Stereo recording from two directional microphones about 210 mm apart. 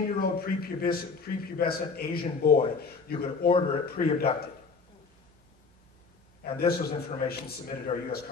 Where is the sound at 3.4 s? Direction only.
25° left (ahead or behind).